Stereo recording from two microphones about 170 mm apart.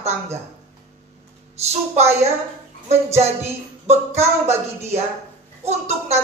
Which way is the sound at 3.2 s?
40° right (ahead or behind).